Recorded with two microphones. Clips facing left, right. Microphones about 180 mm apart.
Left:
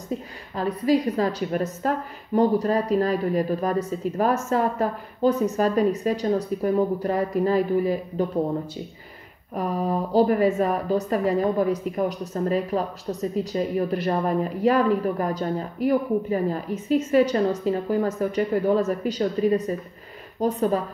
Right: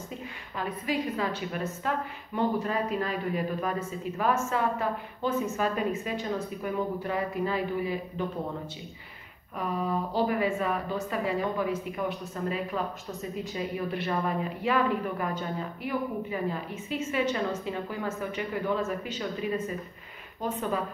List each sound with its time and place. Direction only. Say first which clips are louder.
0.6 s a woman's voice: left 9 dB; 35° left (ahead or behind)
9.6 s a woman's voice: left 5 dB; 40° left (ahead or behind)